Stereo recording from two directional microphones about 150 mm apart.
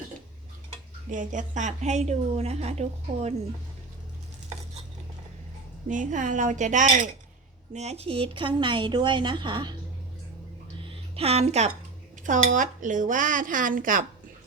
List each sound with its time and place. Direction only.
1.1 s a woman's voice: 60° right (ahead or behind)
5.9 s speech: 55° right (ahead or behind); by 9.7 s 30° right (ahead or behind)
10.8 s a sound: 35° right (ahead or behind)
12.2 s speech: 60° right (ahead or behind)